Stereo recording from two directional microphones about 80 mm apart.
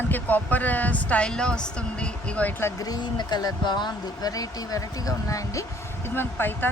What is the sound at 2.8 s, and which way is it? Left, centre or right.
Speech, left.